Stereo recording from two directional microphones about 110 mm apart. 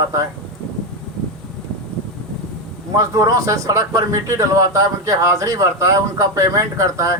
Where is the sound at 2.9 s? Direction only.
30° right (ahead or behind).